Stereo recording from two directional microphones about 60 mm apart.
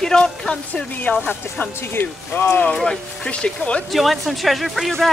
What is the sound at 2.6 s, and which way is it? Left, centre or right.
Speech, centre.